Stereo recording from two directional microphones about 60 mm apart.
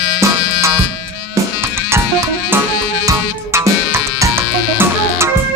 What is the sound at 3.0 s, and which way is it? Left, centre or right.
Music, right.